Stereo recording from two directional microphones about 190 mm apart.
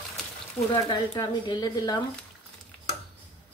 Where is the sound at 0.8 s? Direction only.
25° left (ahead or behind).